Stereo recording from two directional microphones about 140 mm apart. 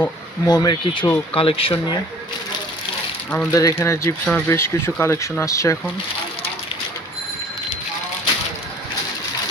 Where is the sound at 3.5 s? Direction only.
25° left (ahead or behind).